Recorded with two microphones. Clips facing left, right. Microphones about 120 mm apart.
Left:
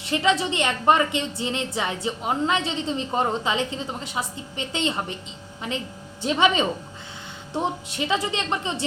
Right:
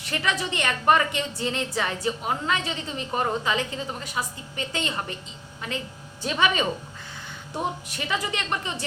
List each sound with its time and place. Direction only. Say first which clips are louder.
0.0 s a woman's voice: left 6 dB; 20° left (ahead or behind)